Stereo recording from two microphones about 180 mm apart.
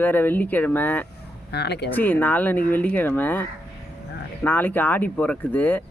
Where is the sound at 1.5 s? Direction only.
70° left (ahead or behind).